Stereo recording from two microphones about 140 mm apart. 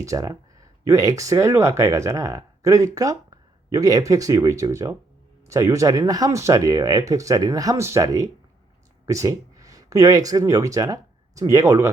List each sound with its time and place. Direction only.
0.0 s speech: 25° right (ahead or behind)